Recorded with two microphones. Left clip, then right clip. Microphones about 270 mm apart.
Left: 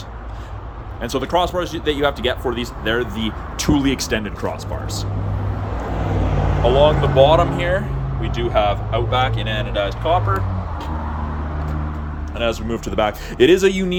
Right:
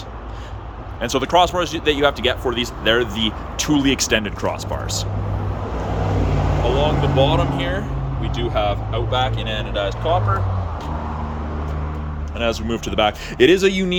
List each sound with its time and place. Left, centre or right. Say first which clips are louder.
1.0 s speech: right 3 dB; centre
6.7 s speech: left 6 dB; centre
12.4 s speech: even; centre